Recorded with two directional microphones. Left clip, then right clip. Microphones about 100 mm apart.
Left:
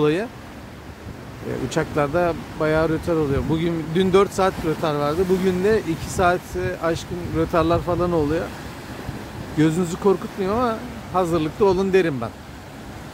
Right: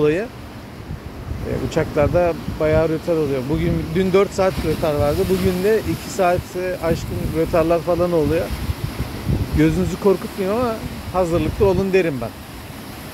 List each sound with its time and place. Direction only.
0.0 s speech: 35° left (ahead or behind)
1.7 s speech: 30° left (ahead or behind)
9.6 s speech: 20° left (ahead or behind)
11.1 s speech: 35° left (ahead or behind)